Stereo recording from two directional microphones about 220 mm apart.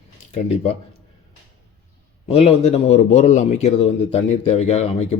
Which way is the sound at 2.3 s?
30° left (ahead or behind).